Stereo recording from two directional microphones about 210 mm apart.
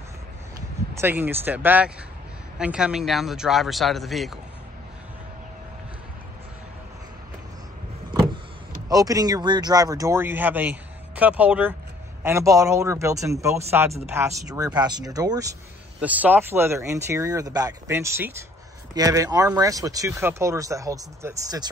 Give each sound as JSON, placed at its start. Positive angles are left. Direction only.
{"t": 0.9, "sound": "speech", "side_deg": -10}
{"t": 8.8, "sound": "speech", "side_deg": -15}